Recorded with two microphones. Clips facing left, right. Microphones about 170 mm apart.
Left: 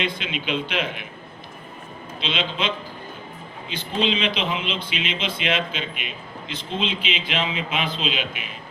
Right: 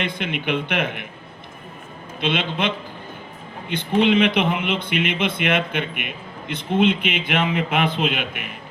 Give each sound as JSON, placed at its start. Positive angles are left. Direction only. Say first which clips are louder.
{"t": 0.0, "sound": "speech", "louder": "right 2 dB", "side_deg": -55}
{"t": 2.2, "sound": "speech", "louder": "right 4 dB", "side_deg": -55}